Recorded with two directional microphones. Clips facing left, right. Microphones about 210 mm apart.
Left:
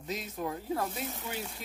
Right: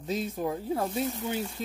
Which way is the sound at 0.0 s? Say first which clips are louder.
Right 6 dB; 30° right (ahead or behind).